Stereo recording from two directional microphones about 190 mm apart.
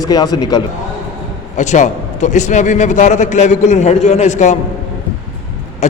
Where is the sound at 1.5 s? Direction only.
40° left (ahead or behind).